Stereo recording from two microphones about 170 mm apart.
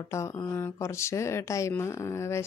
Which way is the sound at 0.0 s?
20° left (ahead or behind).